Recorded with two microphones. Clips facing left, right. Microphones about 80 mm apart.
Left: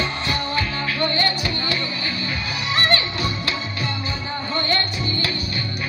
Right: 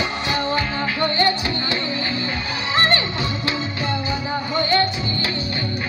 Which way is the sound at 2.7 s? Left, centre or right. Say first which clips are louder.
Right 2 dB; right.